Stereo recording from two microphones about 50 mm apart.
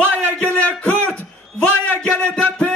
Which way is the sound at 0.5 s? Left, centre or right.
Left.